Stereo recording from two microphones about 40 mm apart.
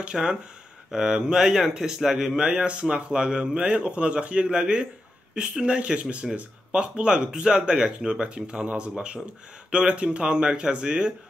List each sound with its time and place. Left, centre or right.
0.0 s speech: right
2.6 s speech: right